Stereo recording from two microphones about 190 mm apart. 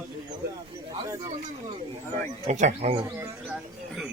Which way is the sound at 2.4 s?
40° right (ahead or behind).